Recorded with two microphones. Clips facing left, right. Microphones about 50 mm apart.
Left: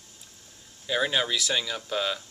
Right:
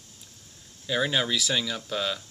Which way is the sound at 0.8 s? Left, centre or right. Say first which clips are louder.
Even; centre.